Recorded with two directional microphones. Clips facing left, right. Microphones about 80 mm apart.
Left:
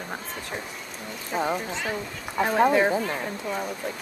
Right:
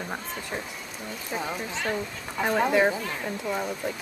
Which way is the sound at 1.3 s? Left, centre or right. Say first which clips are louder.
Left 5 dB; centre.